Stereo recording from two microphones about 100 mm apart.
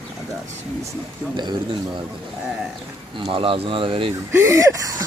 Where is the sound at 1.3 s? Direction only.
50° right (ahead or behind).